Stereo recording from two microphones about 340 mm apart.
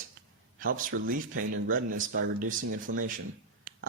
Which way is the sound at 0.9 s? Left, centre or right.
Right.